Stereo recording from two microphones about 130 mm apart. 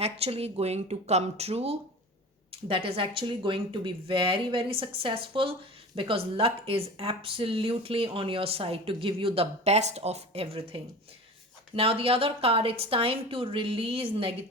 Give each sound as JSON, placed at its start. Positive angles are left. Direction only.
{"t": 0.0, "sound": "speech", "side_deg": -50}